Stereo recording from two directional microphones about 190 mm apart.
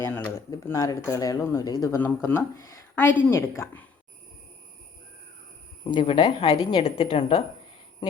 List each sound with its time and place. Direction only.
0.0 s a sound: 10° left (ahead or behind)
0.5 s speech: 15° left (ahead or behind)
5.8 s speech: 25° left (ahead or behind)